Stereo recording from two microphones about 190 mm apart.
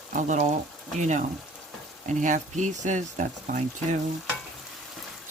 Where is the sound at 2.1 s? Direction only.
40° right (ahead or behind).